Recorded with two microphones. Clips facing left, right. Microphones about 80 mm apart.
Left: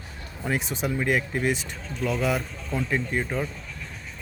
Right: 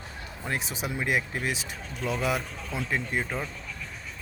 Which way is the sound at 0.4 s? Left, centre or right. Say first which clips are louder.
Left 5 dB; centre.